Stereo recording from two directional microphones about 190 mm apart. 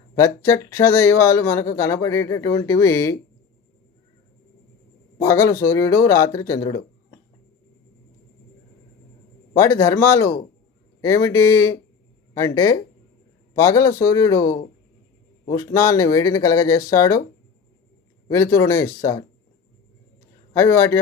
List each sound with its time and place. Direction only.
0.2 s speech: 15° left (ahead or behind)
5.1 s speech: 15° left (ahead or behind)
9.6 s speech: 15° left (ahead or behind)
18.3 s speech: 15° left (ahead or behind)
20.5 s speech: 15° left (ahead or behind)